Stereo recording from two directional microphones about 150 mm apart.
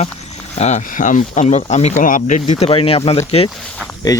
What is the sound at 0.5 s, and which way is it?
Speech, 50° left (ahead or behind).